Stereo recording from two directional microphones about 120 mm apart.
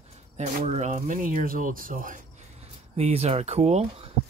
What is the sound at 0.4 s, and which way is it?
Speech, 70° right (ahead or behind).